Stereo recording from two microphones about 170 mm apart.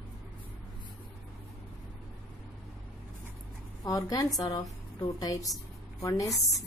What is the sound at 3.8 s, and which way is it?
A woman's voice, 20° left (ahead or behind).